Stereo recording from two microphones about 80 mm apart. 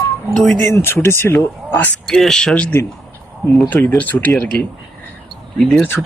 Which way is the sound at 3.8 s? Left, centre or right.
Left.